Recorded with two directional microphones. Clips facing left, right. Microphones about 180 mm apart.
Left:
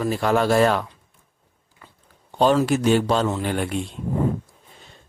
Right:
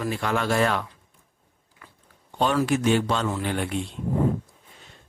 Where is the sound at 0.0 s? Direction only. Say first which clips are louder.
Left 6 dB; 35° left (ahead or behind).